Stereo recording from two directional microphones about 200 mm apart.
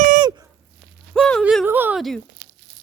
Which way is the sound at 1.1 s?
Centre (ahead or behind).